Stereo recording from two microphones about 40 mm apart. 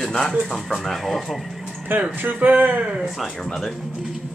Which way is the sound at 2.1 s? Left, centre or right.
Right.